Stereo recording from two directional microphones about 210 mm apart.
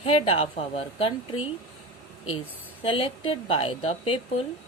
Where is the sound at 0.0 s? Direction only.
25° left (ahead or behind).